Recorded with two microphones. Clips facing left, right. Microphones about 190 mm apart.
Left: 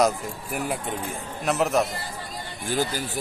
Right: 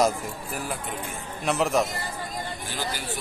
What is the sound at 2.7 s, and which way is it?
Speech, 45° left (ahead or behind).